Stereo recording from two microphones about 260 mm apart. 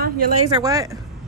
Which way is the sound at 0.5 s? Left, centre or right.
Centre.